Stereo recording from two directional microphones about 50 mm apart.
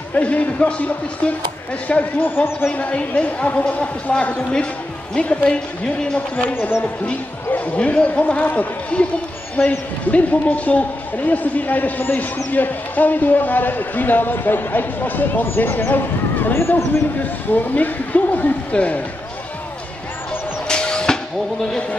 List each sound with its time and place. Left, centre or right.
0.1 s a woman's voice: left
2.7 s a woman's voice: left
6.5 s speech: left
7.5 s a woman's voice: left
17.2 s a man's voice: left
20.6 s music: centre